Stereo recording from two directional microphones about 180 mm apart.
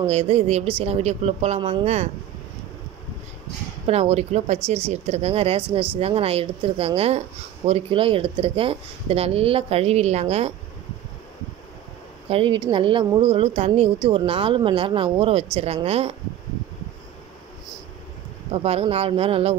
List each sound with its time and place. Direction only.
0.0 s speech: 35° right (ahead or behind)
3.8 s speech: 35° right (ahead or behind)
12.3 s speech: 30° right (ahead or behind)
18.5 s speech: 35° right (ahead or behind)